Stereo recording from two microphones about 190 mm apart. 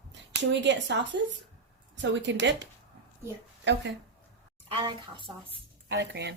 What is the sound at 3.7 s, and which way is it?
Speech, 70° right (ahead or behind).